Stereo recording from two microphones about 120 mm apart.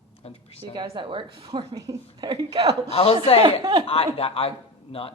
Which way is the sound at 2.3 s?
50° right (ahead or behind).